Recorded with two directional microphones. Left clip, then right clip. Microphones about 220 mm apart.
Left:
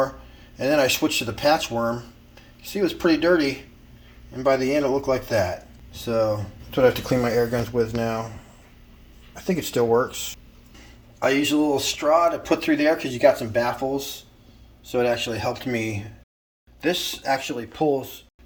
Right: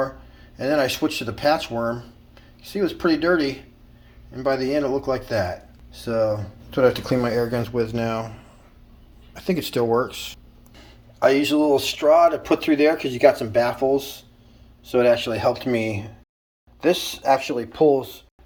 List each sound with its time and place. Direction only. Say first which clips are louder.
0.6 s speech: left 1 dB; 10° right (ahead or behind)
1.7 s speech: even; 15° right (ahead or behind)
4.9 s speech: left 1 dB; 5° right (ahead or behind)
9.3 s speech: right 1 dB; 5° right (ahead or behind)
11.2 s speech: right 3 dB; 10° right (ahead or behind)